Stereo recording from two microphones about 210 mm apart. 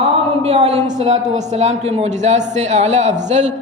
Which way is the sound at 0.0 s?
30° right (ahead or behind).